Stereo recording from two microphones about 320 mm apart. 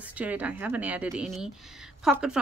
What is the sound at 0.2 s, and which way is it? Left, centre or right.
Speech, centre.